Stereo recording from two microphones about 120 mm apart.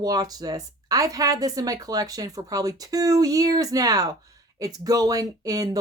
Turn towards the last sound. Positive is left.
turn(degrees=-30)  # may be behind; listen again after turning